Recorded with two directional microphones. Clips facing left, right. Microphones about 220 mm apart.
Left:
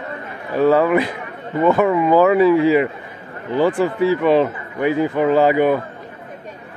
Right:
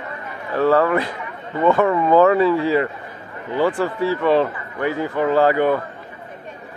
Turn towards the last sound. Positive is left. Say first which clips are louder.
# left 2 dB
turn(degrees=15)  # may be behind; listen again after turning